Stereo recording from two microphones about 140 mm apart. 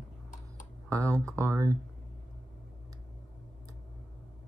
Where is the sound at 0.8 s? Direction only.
20° right (ahead or behind).